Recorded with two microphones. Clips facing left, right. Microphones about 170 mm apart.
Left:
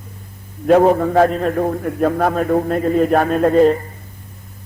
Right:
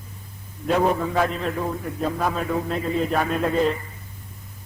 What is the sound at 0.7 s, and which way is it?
A man's voice, 55° left (ahead or behind).